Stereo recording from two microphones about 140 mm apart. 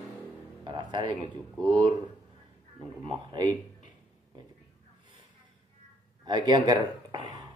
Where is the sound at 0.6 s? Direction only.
35° right (ahead or behind).